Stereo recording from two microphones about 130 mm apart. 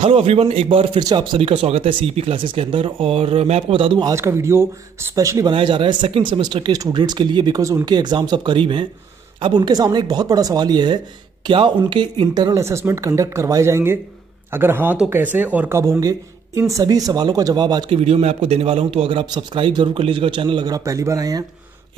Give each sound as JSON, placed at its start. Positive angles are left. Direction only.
{"t": 0.0, "sound": "speech", "side_deg": -45}
{"t": 4.1, "sound": "speech", "side_deg": -20}
{"t": 5.5, "sound": "a man's voice", "side_deg": -40}
{"t": 15.8, "sound": "speech", "side_deg": -25}
{"t": 17.9, "sound": "a man's voice", "side_deg": -50}